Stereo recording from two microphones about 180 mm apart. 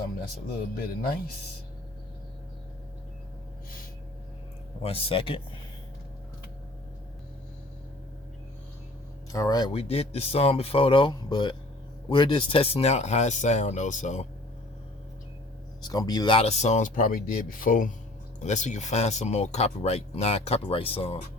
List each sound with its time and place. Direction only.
4.8 s speech: 35° left (ahead or behind)
9.3 s speech: 20° left (ahead or behind); by 14.3 s 45° left (ahead or behind)
15.8 s speech: 20° left (ahead or behind)